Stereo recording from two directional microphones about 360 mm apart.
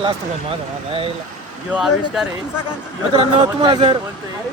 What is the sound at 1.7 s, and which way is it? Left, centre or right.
Speech, centre.